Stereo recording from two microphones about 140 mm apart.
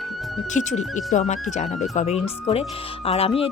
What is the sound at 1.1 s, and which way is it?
Speech, 60° left (ahead or behind).